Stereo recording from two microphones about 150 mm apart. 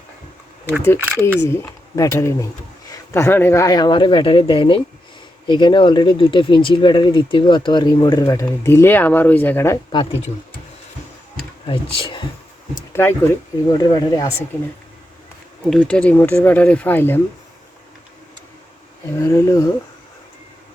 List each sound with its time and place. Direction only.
1.2 s speech: 15° left (ahead or behind)
11.6 s speech: 35° left (ahead or behind)
12.9 s speech: 15° left (ahead or behind)
15.7 s speech: 5° left (ahead or behind)
19.2 s speech: 20° left (ahead or behind)